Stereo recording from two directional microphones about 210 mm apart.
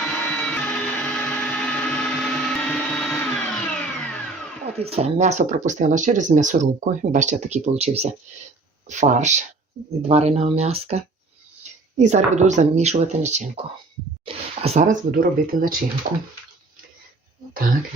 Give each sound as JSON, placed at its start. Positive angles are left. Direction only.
{"t": 0.0, "sound": "blender", "side_deg": 5}
{"t": 4.6, "sound": "speech", "side_deg": -30}